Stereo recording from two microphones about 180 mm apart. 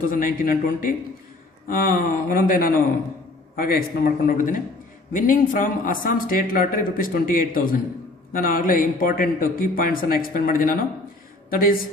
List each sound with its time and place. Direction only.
0.1 s speech: 50° left (ahead or behind)